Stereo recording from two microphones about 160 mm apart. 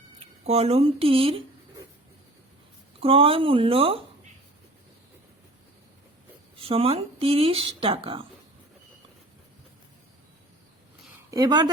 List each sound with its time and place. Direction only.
0.4 s speech: 40° right (ahead or behind)
3.0 s speech: 35° right (ahead or behind)
6.6 s speech: 35° right (ahead or behind)
11.3 s speech: 25° right (ahead or behind)